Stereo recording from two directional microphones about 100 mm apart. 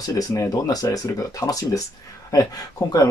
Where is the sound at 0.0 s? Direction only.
35° left (ahead or behind).